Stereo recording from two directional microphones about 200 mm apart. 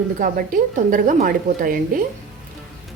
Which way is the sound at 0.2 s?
45° right (ahead or behind).